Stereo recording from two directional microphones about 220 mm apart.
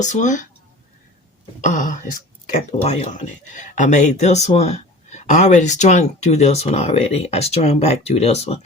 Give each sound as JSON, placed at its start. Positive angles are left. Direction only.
{"t": 0.0, "sound": "speech", "side_deg": 35}
{"t": 1.6, "sound": "speech", "side_deg": 35}